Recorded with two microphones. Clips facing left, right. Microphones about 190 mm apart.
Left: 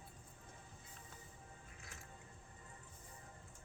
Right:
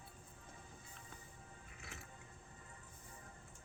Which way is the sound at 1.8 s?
70° right (ahead or behind).